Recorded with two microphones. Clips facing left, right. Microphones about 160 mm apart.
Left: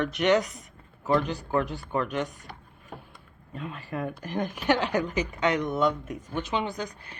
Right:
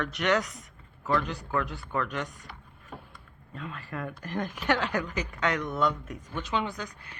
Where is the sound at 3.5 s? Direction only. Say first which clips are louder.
Left 3 dB; 15° left (ahead or behind).